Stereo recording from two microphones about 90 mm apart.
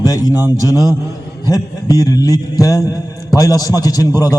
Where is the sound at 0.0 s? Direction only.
40° left (ahead or behind).